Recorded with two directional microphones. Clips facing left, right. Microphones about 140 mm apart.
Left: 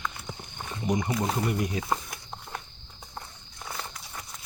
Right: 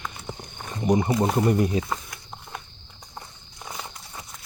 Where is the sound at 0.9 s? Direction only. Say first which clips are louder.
Right 6 dB; 30° right (ahead or behind).